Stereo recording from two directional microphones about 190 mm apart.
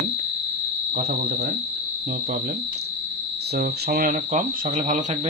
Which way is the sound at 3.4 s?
60° right (ahead or behind).